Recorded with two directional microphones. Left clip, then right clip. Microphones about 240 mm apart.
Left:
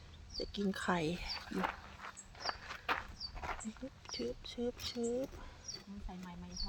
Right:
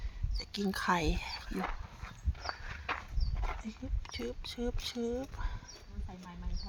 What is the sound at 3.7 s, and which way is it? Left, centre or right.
Speech, right.